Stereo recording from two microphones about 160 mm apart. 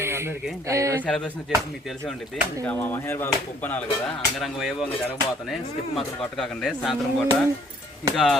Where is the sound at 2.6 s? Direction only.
10° left (ahead or behind).